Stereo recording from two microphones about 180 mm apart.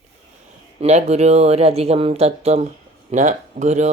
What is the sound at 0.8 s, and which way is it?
Speech, 35° right (ahead or behind).